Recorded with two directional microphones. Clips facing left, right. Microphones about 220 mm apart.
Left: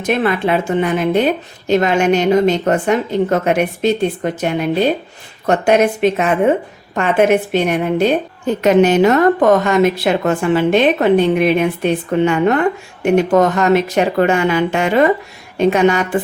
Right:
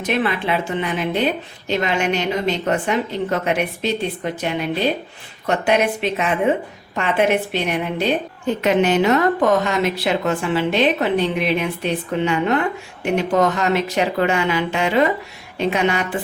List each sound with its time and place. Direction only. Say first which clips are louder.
0.0 s a woman's voice: left 5 dB; 50° left (ahead or behind)